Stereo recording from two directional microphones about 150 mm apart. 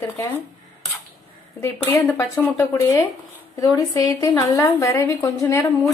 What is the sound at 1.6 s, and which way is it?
A woman's voice, 15° left (ahead or behind).